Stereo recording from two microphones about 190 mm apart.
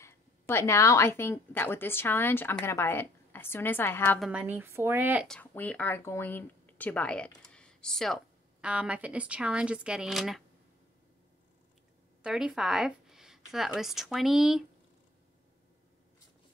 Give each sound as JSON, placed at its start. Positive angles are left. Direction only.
{"t": 0.0, "sound": "a woman's voice", "side_deg": 15}
{"t": 4.2, "sound": "speech", "side_deg": -5}
{"t": 5.3, "sound": "speech", "side_deg": 10}
{"t": 12.2, "sound": "a woman's voice", "side_deg": -5}